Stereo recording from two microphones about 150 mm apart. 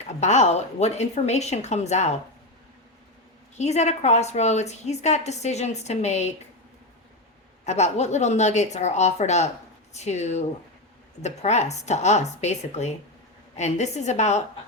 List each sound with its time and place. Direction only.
0.2 s a woman's voice: 50° left (ahead or behind)
3.6 s a woman's voice: 50° left (ahead or behind)
7.6 s a woman's voice: 50° left (ahead or behind)